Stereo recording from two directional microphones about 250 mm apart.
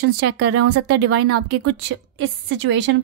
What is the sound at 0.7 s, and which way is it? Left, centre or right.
Speech, right.